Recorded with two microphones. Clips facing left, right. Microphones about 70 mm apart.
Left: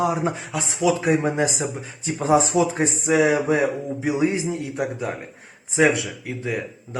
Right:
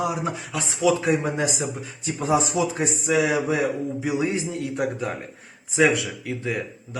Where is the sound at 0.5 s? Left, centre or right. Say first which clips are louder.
Right 1 dB; centre.